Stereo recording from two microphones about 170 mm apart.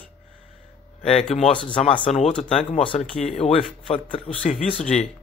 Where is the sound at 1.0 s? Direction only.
40° left (ahead or behind).